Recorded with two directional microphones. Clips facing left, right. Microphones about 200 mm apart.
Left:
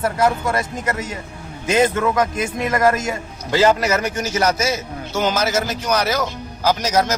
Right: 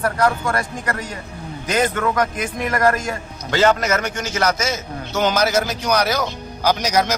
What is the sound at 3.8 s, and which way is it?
Speech, 35° left (ahead or behind).